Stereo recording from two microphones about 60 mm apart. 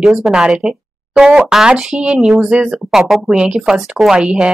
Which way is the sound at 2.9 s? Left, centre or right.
Centre.